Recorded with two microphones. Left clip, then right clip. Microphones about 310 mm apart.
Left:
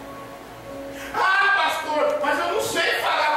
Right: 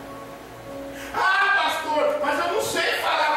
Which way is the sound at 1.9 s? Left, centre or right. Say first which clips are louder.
Even; centre.